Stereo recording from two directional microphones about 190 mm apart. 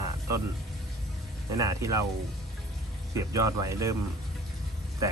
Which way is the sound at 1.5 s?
15° right (ahead or behind).